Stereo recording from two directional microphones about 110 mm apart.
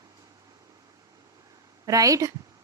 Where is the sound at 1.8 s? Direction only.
30° right (ahead or behind).